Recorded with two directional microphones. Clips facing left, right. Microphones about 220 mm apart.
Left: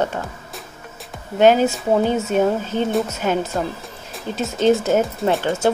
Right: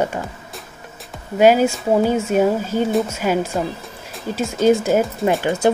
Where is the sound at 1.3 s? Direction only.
10° right (ahead or behind).